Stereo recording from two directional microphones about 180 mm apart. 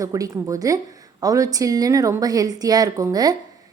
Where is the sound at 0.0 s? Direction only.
20° right (ahead or behind).